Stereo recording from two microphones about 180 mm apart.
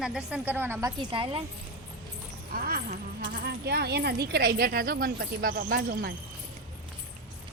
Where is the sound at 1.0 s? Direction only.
25° right (ahead or behind).